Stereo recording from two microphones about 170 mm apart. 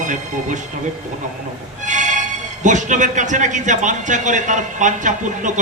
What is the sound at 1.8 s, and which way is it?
Music, 45° right (ahead or behind).